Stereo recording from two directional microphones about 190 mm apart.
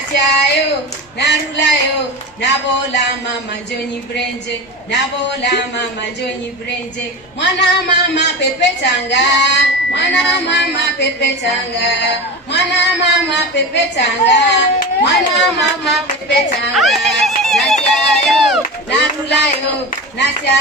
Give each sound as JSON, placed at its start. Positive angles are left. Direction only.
{"t": 0.2, "sound": "a man's voice", "side_deg": 65}
{"t": 7.3, "sound": "speech", "side_deg": 65}
{"t": 15.1, "sound": "speech", "side_deg": 0}
{"t": 16.7, "sound": "a sound", "side_deg": 0}
{"t": 18.9, "sound": "speech", "side_deg": 65}